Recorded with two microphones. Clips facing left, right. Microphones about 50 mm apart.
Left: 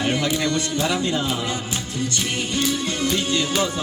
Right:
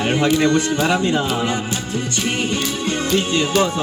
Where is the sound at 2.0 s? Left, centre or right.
Right.